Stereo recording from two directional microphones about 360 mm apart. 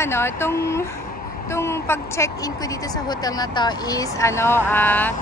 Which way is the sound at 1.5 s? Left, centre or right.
Centre.